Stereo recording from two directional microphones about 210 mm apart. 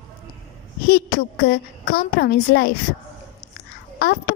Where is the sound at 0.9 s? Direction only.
45° left (ahead or behind).